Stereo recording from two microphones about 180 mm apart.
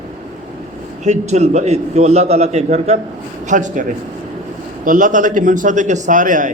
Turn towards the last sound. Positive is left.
turn(degrees=-45)  # may be behind; listen again after turning